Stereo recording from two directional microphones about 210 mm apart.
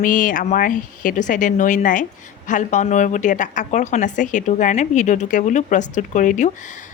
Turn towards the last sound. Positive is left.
turn(degrees=35)  # may be behind; listen again after turning